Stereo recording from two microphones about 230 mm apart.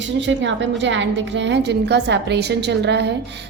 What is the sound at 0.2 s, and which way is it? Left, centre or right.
A woman's voice, right.